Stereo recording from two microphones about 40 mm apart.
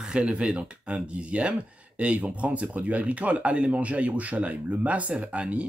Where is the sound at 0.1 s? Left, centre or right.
Right.